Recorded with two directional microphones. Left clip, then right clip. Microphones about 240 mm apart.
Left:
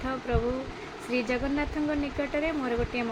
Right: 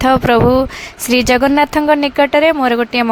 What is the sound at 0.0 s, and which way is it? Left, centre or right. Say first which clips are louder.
Speech: right 19 dB; right.